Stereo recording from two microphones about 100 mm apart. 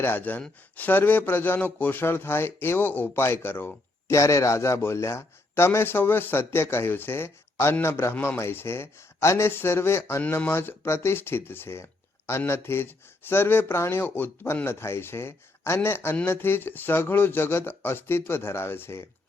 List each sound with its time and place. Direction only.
0.0 s speech: 20° left (ahead or behind)
4.2 s speech: 30° left (ahead or behind)
8.1 s speech: 15° left (ahead or behind)
8.4 s speech: 25° left (ahead or behind)